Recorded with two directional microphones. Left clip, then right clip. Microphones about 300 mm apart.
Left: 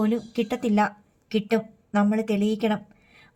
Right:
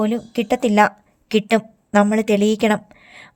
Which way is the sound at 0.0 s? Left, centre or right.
Right.